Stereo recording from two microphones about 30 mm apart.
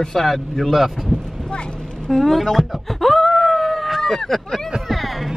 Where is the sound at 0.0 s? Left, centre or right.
Centre.